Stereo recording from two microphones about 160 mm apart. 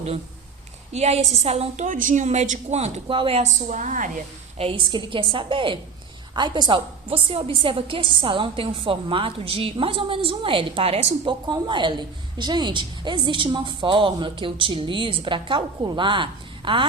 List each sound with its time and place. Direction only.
0.9 s a woman's voice: 45° right (ahead or behind)
4.5 s a woman's voice: 35° right (ahead or behind)